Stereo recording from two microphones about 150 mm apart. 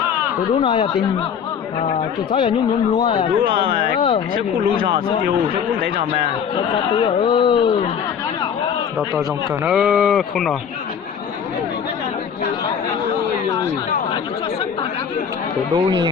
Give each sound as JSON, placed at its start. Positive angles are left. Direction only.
{"t": 0.6, "sound": "speech", "side_deg": 35}
{"t": 4.8, "sound": "speech", "side_deg": -90}
{"t": 6.7, "sound": "speech", "side_deg": 35}
{"t": 9.6, "sound": "speech", "side_deg": -5}
{"t": 15.7, "sound": "speech", "side_deg": -30}